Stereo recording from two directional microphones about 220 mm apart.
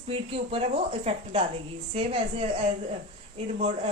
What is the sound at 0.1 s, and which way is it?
Speech, 25° right (ahead or behind).